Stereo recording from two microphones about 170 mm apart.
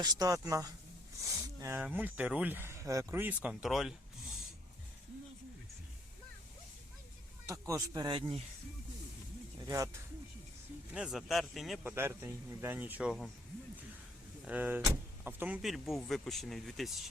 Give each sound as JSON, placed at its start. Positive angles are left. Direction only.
{"t": 0.0, "sound": "speech", "side_deg": -25}
{"t": 7.7, "sound": "speech", "side_deg": -20}
{"t": 9.6, "sound": "speech", "side_deg": -20}
{"t": 10.9, "sound": "speech", "side_deg": 0}
{"t": 11.8, "sound": "speech", "side_deg": -10}
{"t": 14.4, "sound": "speech", "side_deg": -10}